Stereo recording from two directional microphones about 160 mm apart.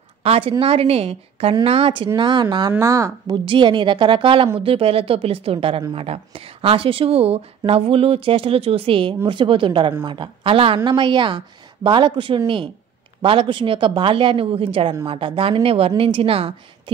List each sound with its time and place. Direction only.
0.2 s speech: 35° right (ahead or behind); by 3.3 s 20° right (ahead or behind)
3.4 s speech: 30° right (ahead or behind)